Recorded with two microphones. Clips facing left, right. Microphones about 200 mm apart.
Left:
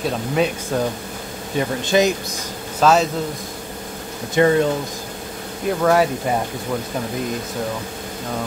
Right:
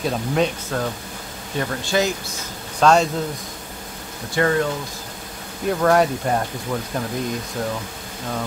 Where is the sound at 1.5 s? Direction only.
20° left (ahead or behind).